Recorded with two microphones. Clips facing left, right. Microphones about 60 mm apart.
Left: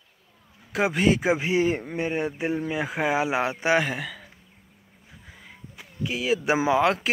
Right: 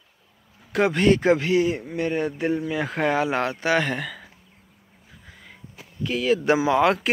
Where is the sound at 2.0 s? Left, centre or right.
Centre.